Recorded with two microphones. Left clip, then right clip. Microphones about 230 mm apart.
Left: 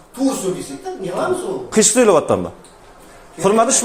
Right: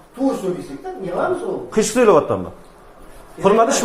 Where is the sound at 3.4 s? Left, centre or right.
Left.